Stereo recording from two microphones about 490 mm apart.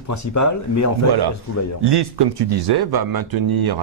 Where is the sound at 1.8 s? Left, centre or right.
Right.